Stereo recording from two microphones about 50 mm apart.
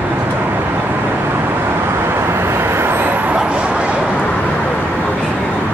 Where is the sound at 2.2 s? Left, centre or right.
Right.